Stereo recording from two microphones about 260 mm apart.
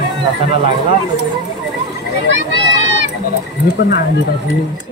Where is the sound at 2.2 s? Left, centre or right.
Right.